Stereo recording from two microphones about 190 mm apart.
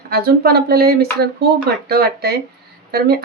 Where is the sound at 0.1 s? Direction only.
55° right (ahead or behind).